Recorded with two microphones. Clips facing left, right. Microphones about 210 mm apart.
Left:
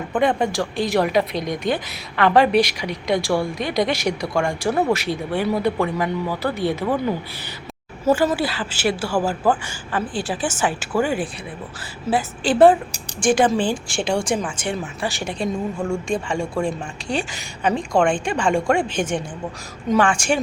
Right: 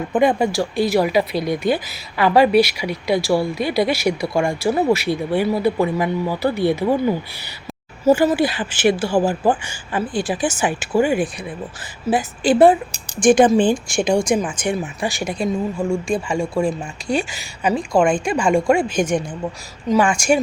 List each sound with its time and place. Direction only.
0.1 s speech: 10° right (ahead or behind)
8.0 s speech: 15° right (ahead or behind)